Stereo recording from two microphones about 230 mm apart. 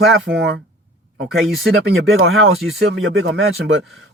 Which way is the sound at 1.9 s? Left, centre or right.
Right.